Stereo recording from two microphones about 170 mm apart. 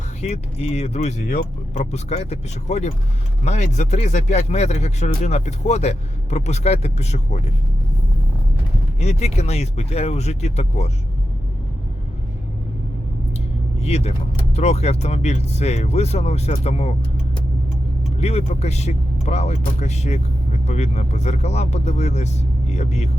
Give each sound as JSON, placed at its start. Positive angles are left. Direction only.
{"t": 0.2, "sound": "speech", "side_deg": 40}
{"t": 9.0, "sound": "speech", "side_deg": 40}
{"t": 13.7, "sound": "speech", "side_deg": 40}
{"t": 18.2, "sound": "speech", "side_deg": 40}